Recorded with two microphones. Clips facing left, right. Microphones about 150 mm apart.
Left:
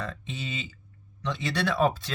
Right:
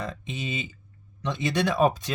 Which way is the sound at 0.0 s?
15° right (ahead or behind).